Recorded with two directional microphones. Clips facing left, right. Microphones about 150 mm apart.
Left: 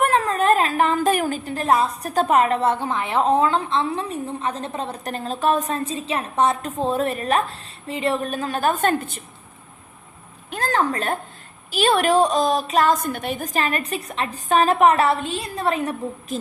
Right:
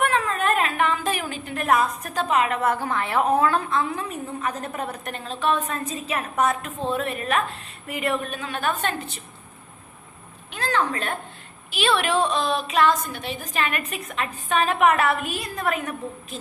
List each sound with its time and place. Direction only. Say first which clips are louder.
0.0 s a woman's voice: left 4 dB; 40° left (ahead or behind)
10.5 s a sound: left 3 dB; 45° left (ahead or behind)
11.7 s a woman's voice: left 5 dB; 45° left (ahead or behind)